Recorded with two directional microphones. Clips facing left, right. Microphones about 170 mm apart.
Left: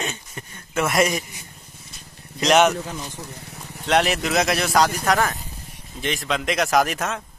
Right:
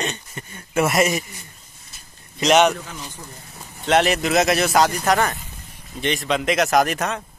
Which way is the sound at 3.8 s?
Centre (ahead or behind).